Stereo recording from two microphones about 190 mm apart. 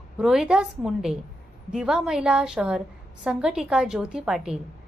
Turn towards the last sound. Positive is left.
turn(degrees=-5)  # may be behind; listen again after turning